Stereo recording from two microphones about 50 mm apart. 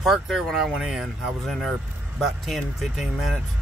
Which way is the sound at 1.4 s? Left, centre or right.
Centre.